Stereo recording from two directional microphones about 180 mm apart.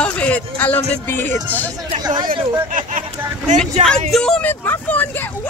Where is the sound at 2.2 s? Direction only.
50° right (ahead or behind).